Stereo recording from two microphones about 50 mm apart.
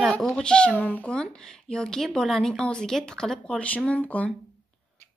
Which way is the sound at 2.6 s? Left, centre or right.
Centre.